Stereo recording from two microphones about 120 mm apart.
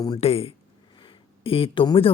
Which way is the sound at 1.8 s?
45° left (ahead or behind).